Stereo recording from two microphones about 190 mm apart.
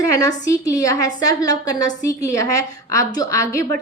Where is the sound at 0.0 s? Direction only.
15° left (ahead or behind).